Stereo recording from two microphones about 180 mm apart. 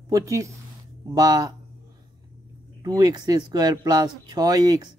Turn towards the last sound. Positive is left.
turn(degrees=-20)  # may be behind; listen again after turning